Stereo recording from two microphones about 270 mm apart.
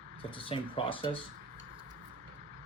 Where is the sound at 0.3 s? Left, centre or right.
Centre.